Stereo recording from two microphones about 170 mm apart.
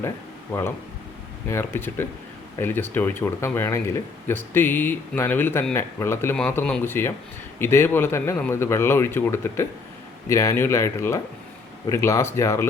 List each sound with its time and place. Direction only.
1.5 s speech: 15° left (ahead or behind)